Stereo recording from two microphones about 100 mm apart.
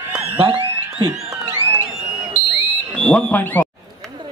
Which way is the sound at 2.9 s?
10° left (ahead or behind).